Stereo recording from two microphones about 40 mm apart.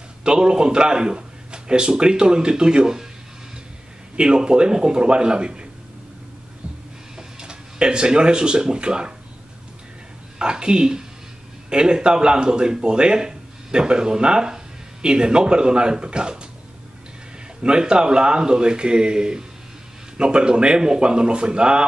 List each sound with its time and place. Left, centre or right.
0.2 s speech: right
4.2 s speech: right
7.2 s speech: right
10.4 s speech: right
17.6 s speech: right